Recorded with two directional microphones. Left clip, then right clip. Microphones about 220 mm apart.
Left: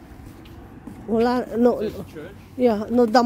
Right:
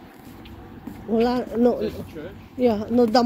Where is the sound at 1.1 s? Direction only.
30° left (ahead or behind).